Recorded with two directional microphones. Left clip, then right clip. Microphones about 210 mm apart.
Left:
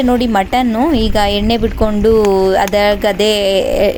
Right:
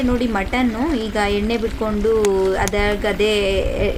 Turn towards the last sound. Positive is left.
turn(degrees=35)  # may be behind; listen again after turning